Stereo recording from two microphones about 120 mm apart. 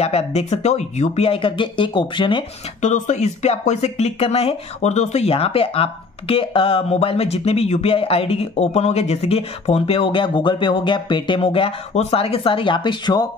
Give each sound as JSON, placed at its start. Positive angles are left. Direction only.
{"t": 0.0, "sound": "speech", "side_deg": 60}
{"t": 2.8, "sound": "speech", "side_deg": 80}